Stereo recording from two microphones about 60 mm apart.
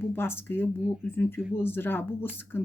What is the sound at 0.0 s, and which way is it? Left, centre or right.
Speech, left.